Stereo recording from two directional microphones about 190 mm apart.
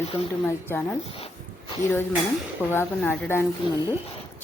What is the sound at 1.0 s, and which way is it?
Speech, 30° left (ahead or behind).